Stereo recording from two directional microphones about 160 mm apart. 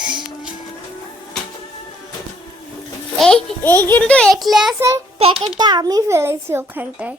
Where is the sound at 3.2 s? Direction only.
5° left (ahead or behind).